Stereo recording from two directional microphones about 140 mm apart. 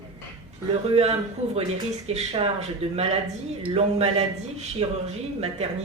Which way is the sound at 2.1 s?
45° right (ahead or behind).